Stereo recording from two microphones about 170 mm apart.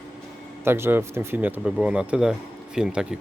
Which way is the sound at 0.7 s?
15° right (ahead or behind).